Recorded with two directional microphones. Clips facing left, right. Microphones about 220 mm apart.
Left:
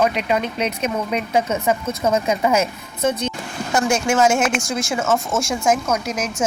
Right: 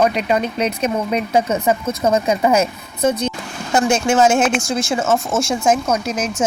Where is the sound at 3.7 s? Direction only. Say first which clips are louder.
Right 3 dB; 20° right (ahead or behind).